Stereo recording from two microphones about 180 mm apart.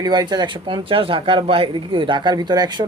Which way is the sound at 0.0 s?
25° right (ahead or behind).